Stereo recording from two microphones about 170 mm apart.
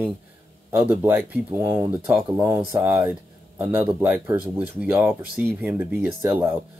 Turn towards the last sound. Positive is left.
turn(degrees=-10)  # may be behind; listen again after turning